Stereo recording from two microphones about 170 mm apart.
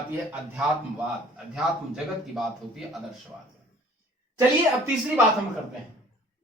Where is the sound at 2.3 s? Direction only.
Centre (ahead or behind).